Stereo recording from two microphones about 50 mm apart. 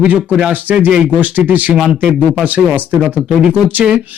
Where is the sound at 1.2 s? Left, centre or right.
Right.